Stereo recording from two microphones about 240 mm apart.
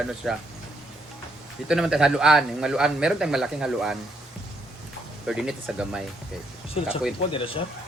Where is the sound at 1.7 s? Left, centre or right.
Centre.